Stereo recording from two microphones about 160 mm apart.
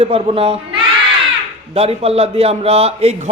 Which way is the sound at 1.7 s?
40° right (ahead or behind).